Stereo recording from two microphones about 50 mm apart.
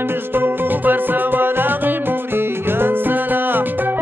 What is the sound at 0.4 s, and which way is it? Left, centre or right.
Music, right.